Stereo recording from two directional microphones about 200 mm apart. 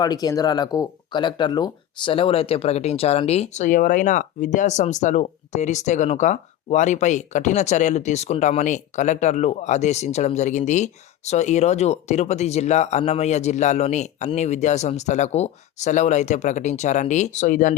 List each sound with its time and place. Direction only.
0.0 s speech: 20° left (ahead or behind); by 17.7 s 40° left (ahead or behind)